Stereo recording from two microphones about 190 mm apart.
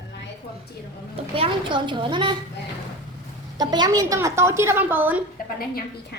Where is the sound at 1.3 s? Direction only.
25° right (ahead or behind).